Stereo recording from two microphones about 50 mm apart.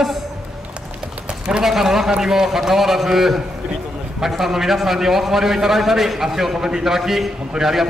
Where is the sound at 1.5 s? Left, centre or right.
Centre.